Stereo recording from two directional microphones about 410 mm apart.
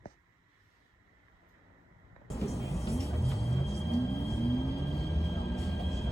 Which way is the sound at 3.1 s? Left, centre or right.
Centre.